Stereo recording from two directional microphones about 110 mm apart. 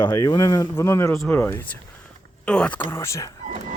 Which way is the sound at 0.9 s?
25° left (ahead or behind).